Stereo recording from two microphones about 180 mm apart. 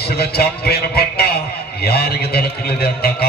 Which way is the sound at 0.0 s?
60° left (ahead or behind).